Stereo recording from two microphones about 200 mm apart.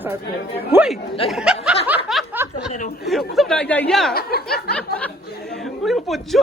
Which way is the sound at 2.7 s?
45° left (ahead or behind).